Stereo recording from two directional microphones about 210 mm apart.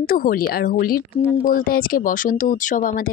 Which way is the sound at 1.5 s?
45° left (ahead or behind).